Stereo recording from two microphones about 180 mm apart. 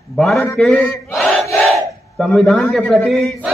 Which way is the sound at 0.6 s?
5° left (ahead or behind).